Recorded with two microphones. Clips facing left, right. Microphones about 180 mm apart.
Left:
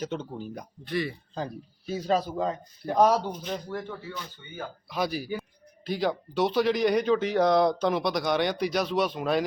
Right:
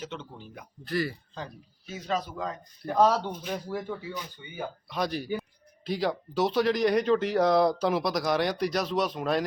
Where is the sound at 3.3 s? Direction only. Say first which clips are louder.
Even; 5° right (ahead or behind).